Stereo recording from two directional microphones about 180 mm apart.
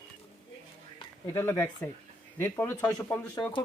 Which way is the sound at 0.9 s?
15° left (ahead or behind).